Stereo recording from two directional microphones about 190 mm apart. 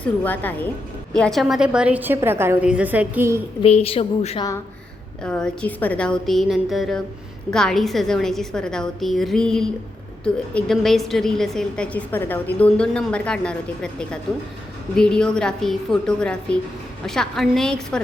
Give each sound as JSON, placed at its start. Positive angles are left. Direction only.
{"t": 0.0, "sound": "a woman's voice", "side_deg": 10}
{"t": 3.6, "sound": "a woman's voice", "side_deg": 30}
{"t": 5.2, "sound": "a woman's voice", "side_deg": 5}